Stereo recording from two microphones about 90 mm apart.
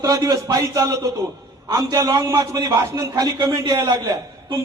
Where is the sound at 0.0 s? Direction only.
50° right (ahead or behind).